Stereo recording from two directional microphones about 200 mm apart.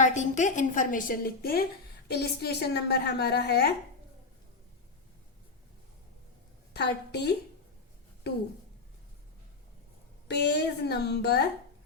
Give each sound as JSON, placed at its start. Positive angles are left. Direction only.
{"t": 0.0, "sound": "a woman's voice", "side_deg": 35}
{"t": 6.7, "sound": "a woman's voice", "side_deg": 55}
{"t": 10.2, "sound": "a woman's voice", "side_deg": 55}